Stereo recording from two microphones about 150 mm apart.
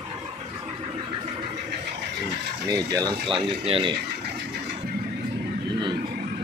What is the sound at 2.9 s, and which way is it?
Speech, 30° right (ahead or behind).